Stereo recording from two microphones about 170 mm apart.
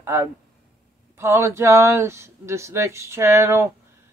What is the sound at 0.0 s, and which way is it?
Speech, 15° right (ahead or behind).